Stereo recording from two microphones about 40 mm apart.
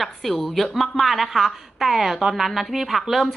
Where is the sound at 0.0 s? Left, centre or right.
Centre.